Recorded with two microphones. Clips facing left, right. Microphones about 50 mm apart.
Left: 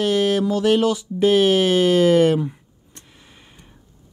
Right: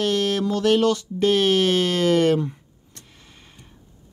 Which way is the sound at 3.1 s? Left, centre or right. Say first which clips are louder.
Left 1 dB; centre.